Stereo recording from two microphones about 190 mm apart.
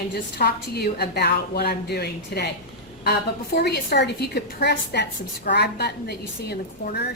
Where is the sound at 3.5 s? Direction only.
60° left (ahead or behind).